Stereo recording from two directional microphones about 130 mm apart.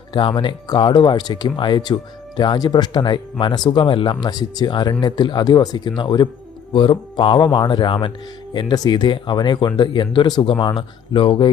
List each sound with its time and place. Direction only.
0.1 s speech: 40° left (ahead or behind)